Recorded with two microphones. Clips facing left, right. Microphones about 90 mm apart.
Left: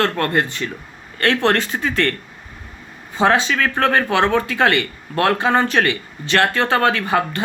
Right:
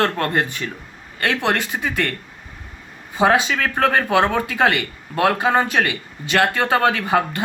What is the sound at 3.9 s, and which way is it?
Speech, 15° right (ahead or behind).